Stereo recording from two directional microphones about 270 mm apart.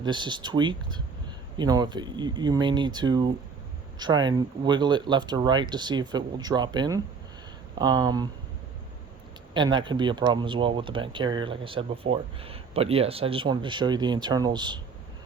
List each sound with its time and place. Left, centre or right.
0.0 s speech: centre
9.6 s speech: centre